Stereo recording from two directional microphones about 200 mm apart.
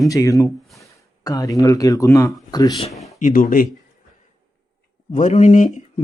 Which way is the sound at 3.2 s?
40° left (ahead or behind).